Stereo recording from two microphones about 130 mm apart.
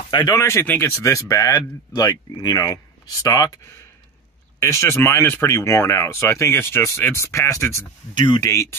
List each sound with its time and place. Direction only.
0.1 s speech: 35° left (ahead or behind)
0.4 s speech: 20° left (ahead or behind)
8.1 s speech: 40° left (ahead or behind)
8.4 s speech: 25° left (ahead or behind)